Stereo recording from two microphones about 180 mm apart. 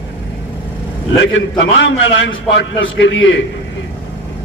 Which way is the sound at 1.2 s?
90° left.